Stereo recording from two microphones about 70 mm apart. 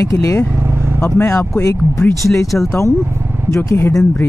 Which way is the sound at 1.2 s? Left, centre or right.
Left.